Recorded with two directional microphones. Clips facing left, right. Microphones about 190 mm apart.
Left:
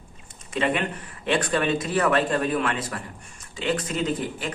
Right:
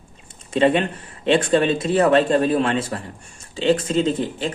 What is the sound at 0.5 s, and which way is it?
Speech, 30° right (ahead or behind).